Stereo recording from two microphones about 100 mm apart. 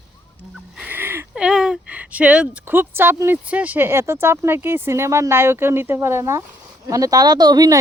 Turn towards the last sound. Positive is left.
turn(degrees=-40)  # may be behind; listen again after turning